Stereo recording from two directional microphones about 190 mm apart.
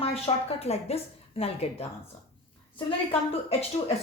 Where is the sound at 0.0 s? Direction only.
30° left (ahead or behind).